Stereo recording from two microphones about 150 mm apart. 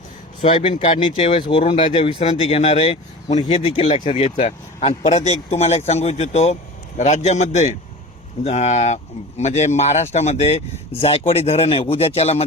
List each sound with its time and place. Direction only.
0.4 s speech: 45° left (ahead or behind)